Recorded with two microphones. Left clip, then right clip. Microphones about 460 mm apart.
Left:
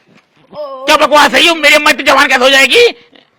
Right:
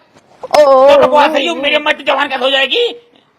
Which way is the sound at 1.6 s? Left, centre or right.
Left.